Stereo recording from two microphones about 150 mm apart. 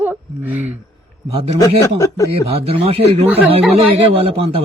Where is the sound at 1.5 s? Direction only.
20° left (ahead or behind).